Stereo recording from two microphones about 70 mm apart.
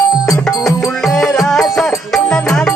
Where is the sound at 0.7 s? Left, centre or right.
Centre.